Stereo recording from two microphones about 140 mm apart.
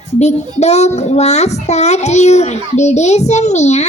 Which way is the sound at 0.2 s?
55° left (ahead or behind).